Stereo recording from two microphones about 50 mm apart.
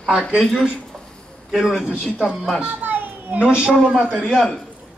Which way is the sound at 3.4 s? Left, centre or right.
Centre.